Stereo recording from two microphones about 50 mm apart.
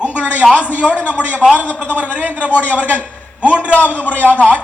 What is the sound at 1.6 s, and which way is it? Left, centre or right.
Speech, left.